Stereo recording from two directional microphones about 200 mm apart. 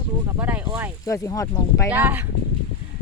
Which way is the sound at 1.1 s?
15° left (ahead or behind).